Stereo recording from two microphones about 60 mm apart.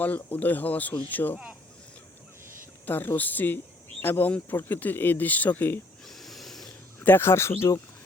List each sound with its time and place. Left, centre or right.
0.0 s speech: left
2.8 s speech: left
6.1 s a sound: centre
7.0 s speech: left